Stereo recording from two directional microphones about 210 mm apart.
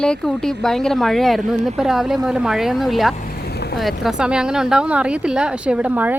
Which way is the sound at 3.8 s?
Centre (ahead or behind).